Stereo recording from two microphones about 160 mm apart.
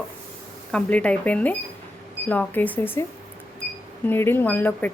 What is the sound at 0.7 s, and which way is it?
Speech, 10° left (ahead or behind).